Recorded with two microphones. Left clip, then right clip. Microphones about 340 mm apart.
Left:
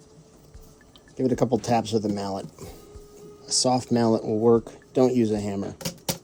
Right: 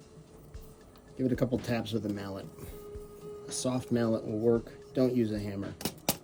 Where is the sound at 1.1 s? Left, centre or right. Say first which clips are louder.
Left 8 dB; centre.